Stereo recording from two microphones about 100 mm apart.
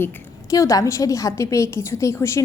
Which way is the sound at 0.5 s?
35° left (ahead or behind).